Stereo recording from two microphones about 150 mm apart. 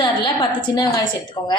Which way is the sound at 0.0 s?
30° left (ahead or behind).